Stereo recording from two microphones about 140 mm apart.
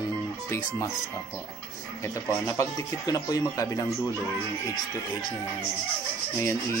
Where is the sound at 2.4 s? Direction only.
20° left (ahead or behind).